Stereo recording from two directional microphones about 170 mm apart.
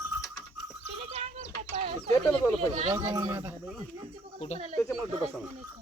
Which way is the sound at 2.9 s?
20° right (ahead or behind).